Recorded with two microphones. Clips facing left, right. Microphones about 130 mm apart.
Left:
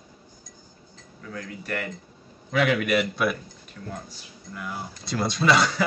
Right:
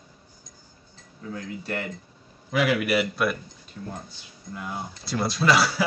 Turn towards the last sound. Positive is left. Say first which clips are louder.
# even
turn(degrees=-5)  # may be behind; listen again after turning